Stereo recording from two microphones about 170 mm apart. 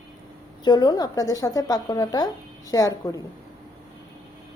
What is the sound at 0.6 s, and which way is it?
A woman's voice, 25° left (ahead or behind).